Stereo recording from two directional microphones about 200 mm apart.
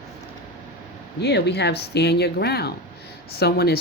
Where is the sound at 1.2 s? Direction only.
55° left (ahead or behind).